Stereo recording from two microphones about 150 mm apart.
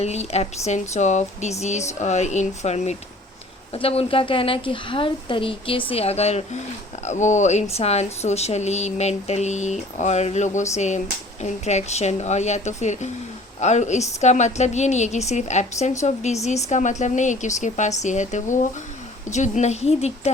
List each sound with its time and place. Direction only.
0.0 s speech: 45° left (ahead or behind)
3.7 s a woman's voice: 40° left (ahead or behind)